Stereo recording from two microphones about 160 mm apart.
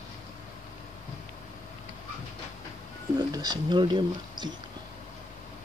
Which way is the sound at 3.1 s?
25° right (ahead or behind).